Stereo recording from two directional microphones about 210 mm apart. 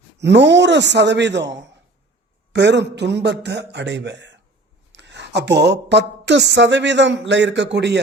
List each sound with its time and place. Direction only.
0.2 s a woman's voice: 55° right (ahead or behind)